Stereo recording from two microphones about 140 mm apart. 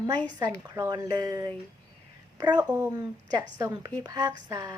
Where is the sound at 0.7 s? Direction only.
30° right (ahead or behind).